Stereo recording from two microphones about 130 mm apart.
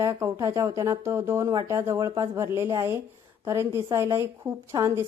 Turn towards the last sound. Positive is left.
turn(degrees=-20)  # may be behind; listen again after turning